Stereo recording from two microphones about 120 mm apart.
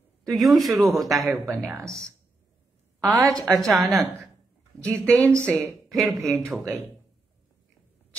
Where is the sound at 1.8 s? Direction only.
25° right (ahead or behind).